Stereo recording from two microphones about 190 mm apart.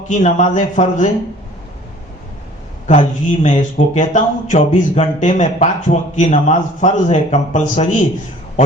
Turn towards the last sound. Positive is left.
turn(degrees=35)  # may be behind; listen again after turning